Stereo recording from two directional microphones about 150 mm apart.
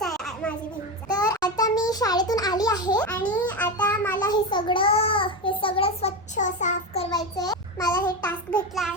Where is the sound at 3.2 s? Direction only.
10° left (ahead or behind).